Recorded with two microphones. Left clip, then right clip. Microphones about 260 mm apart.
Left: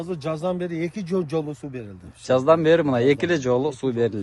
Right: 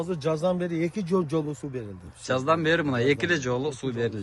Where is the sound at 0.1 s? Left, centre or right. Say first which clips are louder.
Even; centre.